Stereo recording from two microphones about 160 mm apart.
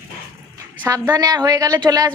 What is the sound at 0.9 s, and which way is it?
A woman's voice, 20° right (ahead or behind).